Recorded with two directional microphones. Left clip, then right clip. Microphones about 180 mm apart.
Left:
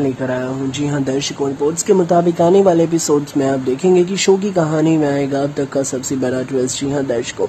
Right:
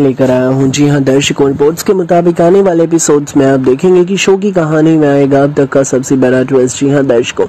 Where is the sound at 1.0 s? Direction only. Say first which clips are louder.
Right 10 dB; 35° right (ahead or behind).